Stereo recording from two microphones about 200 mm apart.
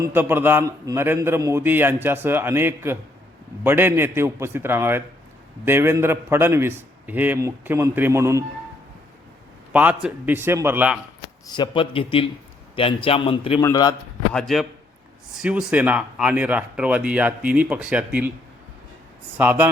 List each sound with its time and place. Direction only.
0.0 s a man's voice: 10° right (ahead or behind)
9.7 s a man's voice: 10° right (ahead or behind)
11.4 s a man's voice: 20° left (ahead or behind)
14.3 s a man's voice: centre (ahead or behind)
19.4 s a man's voice: 10° right (ahead or behind)